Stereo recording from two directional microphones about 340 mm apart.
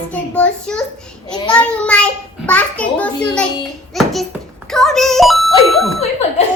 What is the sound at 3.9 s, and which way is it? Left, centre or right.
Hands, centre.